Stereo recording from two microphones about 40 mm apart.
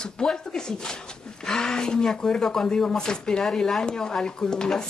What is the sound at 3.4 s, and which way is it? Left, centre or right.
Speech, centre.